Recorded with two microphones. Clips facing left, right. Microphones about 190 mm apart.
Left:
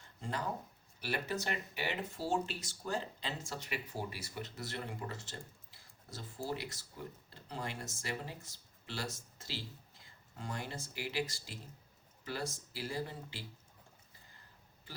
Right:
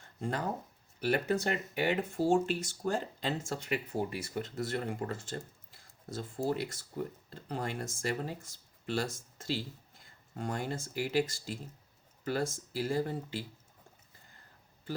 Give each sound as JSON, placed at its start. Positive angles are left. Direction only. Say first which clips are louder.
{"t": 0.2, "sound": "speech", "louder": "right 5 dB", "side_deg": -50}